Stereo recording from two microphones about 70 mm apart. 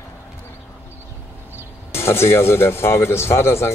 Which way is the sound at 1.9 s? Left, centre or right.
Left.